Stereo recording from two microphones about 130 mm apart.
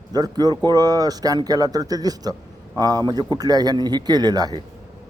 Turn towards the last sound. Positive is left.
turn(degrees=-30)  # may be behind; listen again after turning